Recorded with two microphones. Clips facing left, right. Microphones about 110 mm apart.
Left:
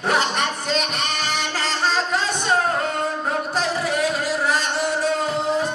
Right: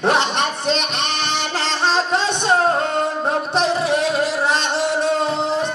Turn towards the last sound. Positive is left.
turn(degrees=-25)  # may be behind; listen again after turning